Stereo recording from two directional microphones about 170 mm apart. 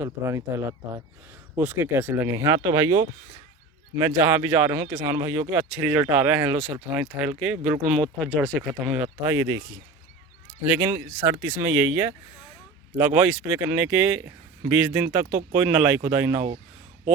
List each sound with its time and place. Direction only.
0.0 s speech: 15° right (ahead or behind)
8.3 s speech: 10° left (ahead or behind)
9.3 s speech: 15° right (ahead or behind)
10.8 s speech: 15° right (ahead or behind)
13.6 s speech: 10° right (ahead or behind)